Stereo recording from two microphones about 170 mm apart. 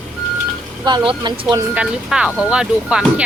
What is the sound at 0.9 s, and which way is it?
Speech, 25° right (ahead or behind).